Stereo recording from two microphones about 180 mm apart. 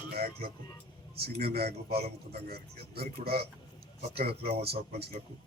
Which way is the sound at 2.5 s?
60° right (ahead or behind).